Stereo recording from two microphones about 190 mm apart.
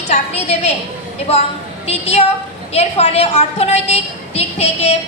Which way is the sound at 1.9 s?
35° left (ahead or behind).